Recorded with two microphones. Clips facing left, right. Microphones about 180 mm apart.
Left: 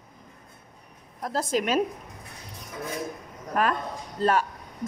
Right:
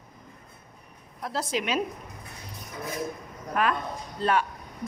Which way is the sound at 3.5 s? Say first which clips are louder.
Left 1 dB; 40° left (ahead or behind).